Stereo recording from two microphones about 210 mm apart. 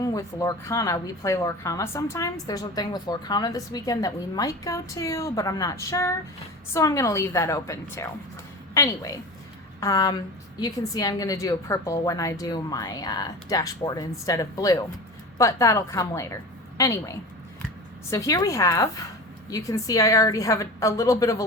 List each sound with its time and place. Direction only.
0.0 s a woman's voice: 15° left (ahead or behind)